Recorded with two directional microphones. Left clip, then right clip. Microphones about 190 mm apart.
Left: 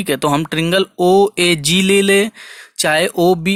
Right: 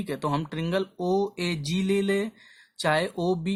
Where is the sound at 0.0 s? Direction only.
35° left (ahead or behind).